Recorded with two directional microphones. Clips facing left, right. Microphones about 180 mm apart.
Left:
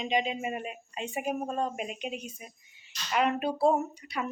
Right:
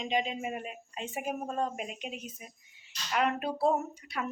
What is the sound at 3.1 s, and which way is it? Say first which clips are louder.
Speech: left 2 dB; centre (ahead or behind).